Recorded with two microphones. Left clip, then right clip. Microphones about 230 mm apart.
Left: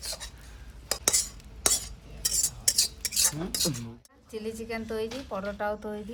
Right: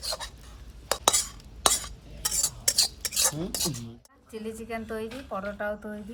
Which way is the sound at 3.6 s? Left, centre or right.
Left.